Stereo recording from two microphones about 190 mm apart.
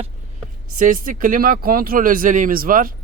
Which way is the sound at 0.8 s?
45° right (ahead or behind).